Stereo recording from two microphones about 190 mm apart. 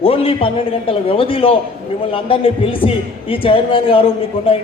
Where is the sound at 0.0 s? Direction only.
30° left (ahead or behind).